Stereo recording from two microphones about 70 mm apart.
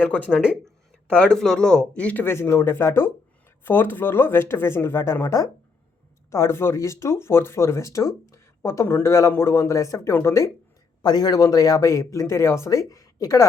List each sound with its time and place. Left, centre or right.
0.0 s speech: left
2.2 s speech: left
11.0 s speech: left